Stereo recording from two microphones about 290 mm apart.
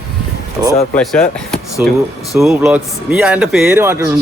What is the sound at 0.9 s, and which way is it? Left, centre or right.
Speech, centre.